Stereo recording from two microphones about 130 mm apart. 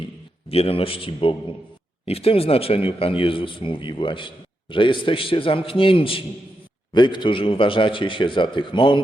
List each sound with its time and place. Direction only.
0.4 s a man's voice: 50° left (ahead or behind)